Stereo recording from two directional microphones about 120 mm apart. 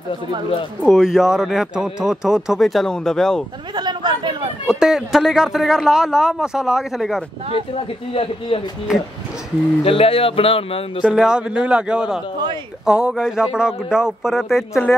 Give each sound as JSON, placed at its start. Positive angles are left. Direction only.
{"t": 0.8, "sound": "speech", "side_deg": 0}
{"t": 3.7, "sound": "chatter", "side_deg": -35}
{"t": 4.6, "sound": "speech", "side_deg": -5}
{"t": 7.7, "sound": "speech", "side_deg": 50}
{"t": 8.9, "sound": "a man's voice", "side_deg": -5}
{"t": 9.8, "sound": "speech", "side_deg": 50}
{"t": 11.0, "sound": "a man's voice", "side_deg": -10}